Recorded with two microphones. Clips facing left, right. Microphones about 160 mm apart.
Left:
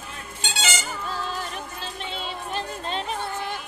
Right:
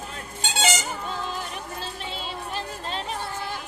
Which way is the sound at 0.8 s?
20° right (ahead or behind).